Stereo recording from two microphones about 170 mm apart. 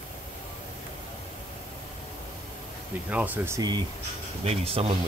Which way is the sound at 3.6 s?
25° right (ahead or behind).